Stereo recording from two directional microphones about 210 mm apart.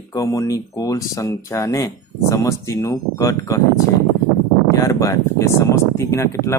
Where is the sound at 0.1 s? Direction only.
15° left (ahead or behind).